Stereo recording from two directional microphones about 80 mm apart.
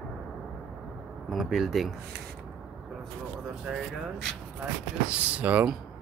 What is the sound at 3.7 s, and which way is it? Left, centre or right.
Speech, centre.